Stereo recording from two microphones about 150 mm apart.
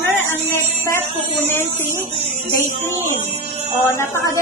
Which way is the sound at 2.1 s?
25° left (ahead or behind).